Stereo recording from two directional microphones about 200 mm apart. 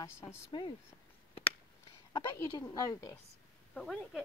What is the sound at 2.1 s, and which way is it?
A woman's voice, 15° left (ahead or behind).